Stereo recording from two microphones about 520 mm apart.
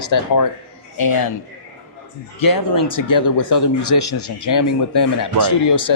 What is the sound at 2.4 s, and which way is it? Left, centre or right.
Speech, left.